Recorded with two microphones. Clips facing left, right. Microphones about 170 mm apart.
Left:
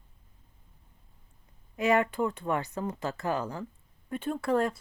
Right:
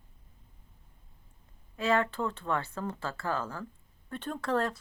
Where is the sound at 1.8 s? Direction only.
15° left (ahead or behind).